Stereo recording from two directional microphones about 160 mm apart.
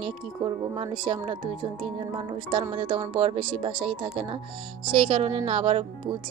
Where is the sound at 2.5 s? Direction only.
35° right (ahead or behind).